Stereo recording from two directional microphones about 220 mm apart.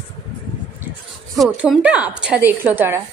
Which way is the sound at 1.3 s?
Centre (ahead or behind).